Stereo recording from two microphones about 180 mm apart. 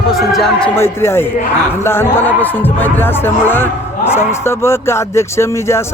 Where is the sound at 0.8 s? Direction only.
15° left (ahead or behind).